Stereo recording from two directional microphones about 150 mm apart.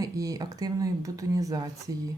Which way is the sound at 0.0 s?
25° right (ahead or behind).